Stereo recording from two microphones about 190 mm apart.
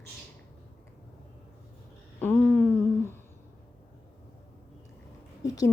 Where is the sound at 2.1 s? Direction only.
10° left (ahead or behind).